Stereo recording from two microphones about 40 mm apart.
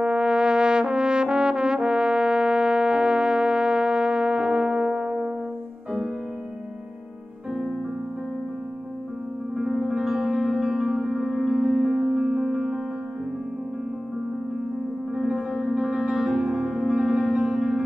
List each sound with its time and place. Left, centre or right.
0.0 s brass instrument: right
9.6 s music: centre
15.1 s music: centre